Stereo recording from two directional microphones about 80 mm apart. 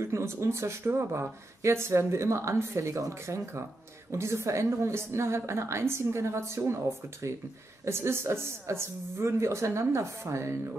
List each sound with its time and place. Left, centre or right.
0.0 s a woman's voice: right